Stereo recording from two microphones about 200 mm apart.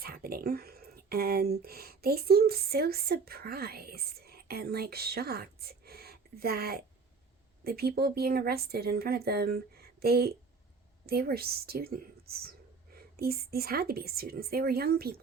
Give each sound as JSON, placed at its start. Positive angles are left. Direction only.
{"t": 0.0, "sound": "speech", "side_deg": -50}